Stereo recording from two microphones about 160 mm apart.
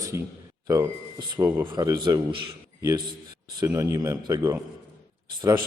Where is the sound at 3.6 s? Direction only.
20° right (ahead or behind).